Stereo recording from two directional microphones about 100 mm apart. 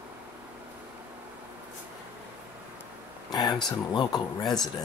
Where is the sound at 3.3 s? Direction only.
45° left (ahead or behind).